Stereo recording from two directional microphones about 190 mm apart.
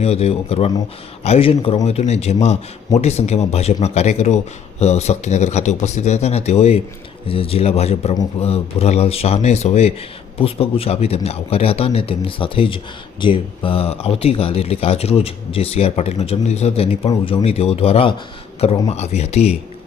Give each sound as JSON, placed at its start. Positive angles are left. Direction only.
{"t": 0.0, "sound": "a man's voice", "side_deg": 35}